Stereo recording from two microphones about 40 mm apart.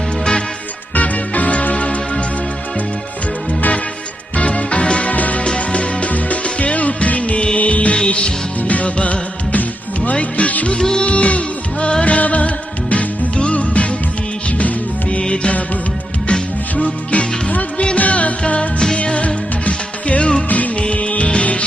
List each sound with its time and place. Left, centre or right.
0.9 s music: left
4.4 s music: left
10.8 s music: centre
11.0 s music: left
15.2 s music: left
16.8 s music: left
20.5 s music: left